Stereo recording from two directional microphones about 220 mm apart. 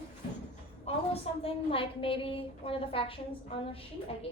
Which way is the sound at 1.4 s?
25° left (ahead or behind).